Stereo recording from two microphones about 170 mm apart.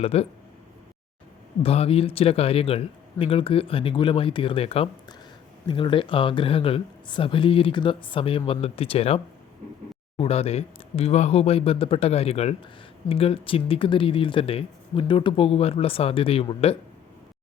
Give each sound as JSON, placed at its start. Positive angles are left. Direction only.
{"t": 0.0, "sound": "speech", "side_deg": 35}
{"t": 1.6, "sound": "speech", "side_deg": 35}